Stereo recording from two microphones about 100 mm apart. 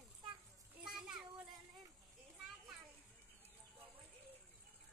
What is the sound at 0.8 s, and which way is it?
Children playing, 5° right (ahead or behind).